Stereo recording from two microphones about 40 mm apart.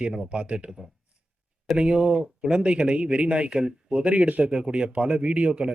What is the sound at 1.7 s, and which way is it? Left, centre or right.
Speech, right.